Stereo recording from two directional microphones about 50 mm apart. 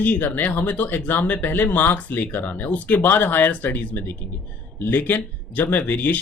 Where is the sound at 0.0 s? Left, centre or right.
Left.